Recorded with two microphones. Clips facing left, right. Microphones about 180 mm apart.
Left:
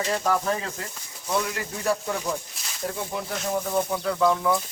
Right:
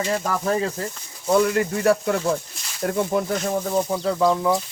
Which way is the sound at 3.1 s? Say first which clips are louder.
Right 9 dB; 50° right (ahead or behind).